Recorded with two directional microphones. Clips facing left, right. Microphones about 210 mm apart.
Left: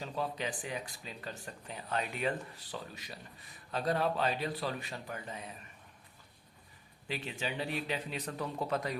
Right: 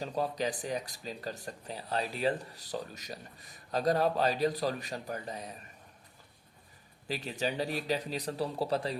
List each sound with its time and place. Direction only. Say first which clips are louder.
0.0 s speech: right 4 dB; 40° right (ahead or behind)
7.1 s speech: right 4 dB; 40° right (ahead or behind)